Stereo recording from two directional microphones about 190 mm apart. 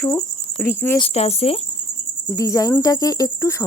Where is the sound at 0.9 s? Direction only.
30° left (ahead or behind).